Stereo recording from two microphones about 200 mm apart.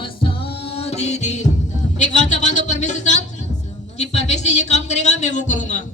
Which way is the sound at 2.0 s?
40° left (ahead or behind).